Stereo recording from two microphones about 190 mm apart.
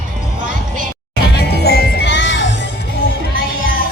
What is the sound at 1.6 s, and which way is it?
Music, 55° left (ahead or behind).